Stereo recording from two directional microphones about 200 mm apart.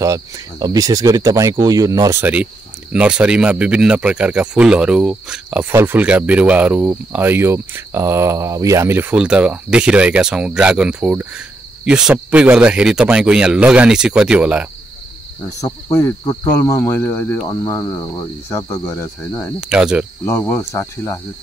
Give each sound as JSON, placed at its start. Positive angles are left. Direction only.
{"t": 0.0, "sound": "speech", "side_deg": -15}
{"t": 15.6, "sound": "cricket", "side_deg": 15}
{"t": 19.7, "sound": "speech", "side_deg": -5}
{"t": 20.2, "sound": "cricket", "side_deg": 10}